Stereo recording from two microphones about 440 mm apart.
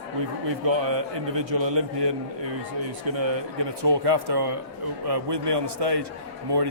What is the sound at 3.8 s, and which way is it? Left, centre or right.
Speech, right.